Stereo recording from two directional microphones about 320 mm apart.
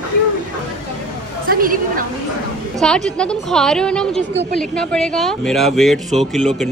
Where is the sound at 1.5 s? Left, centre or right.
Right.